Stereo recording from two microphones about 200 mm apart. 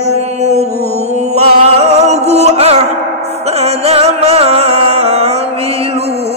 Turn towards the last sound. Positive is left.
turn(degrees=-30)  # may be behind; listen again after turning